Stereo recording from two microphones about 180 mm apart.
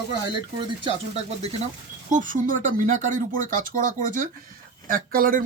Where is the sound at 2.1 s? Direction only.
45° right (ahead or behind).